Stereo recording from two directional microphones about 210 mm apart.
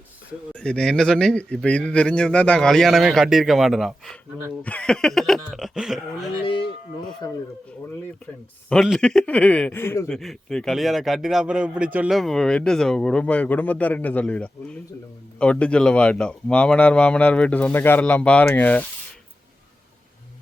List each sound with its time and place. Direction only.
0.5 s a man's voice: 5° left (ahead or behind)
6.4 s a sound: 25° left (ahead or behind)
7.2 s speech: 15° left (ahead or behind)
8.7 s a man's voice: centre (ahead or behind)
10.2 s a man's voice: centre (ahead or behind)